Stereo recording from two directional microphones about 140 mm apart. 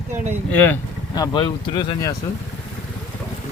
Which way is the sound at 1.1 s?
30° left (ahead or behind).